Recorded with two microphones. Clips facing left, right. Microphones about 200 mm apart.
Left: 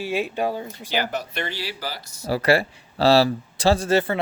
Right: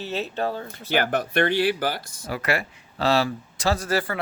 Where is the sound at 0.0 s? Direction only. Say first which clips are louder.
Left 3 dB; 10° left (ahead or behind).